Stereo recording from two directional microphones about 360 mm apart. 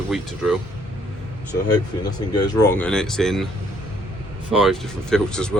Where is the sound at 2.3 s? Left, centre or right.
Centre.